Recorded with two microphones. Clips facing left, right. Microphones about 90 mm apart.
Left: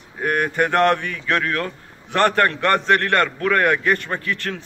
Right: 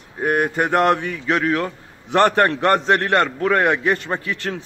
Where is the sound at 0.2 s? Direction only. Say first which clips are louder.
Right 1 dB; 15° right (ahead or behind).